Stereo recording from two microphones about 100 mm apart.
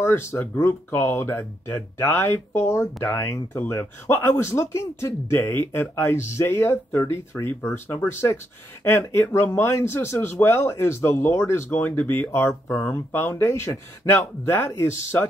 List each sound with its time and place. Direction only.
0.0 s speech: 25° left (ahead or behind)